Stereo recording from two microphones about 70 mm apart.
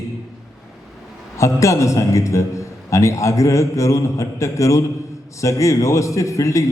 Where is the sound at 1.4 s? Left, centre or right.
Left.